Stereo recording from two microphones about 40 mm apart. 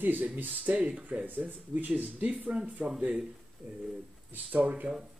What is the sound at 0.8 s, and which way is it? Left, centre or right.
Speech, right.